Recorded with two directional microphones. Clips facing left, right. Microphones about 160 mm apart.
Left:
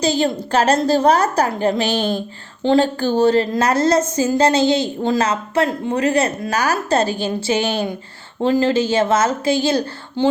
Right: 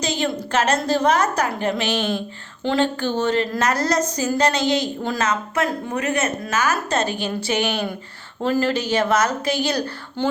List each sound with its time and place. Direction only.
0.0 s a woman's voice: 35° left (ahead or behind)